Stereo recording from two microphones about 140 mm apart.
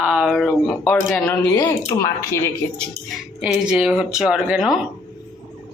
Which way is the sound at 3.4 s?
5° right (ahead or behind).